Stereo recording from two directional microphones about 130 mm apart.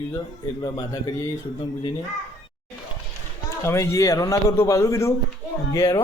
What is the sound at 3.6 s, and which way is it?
A man's voice, 20° left (ahead or behind).